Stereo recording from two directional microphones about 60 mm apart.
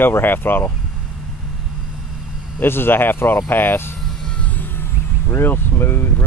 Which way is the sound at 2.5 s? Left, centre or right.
Left.